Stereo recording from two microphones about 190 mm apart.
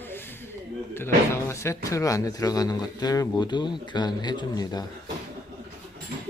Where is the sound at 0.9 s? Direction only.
15° left (ahead or behind).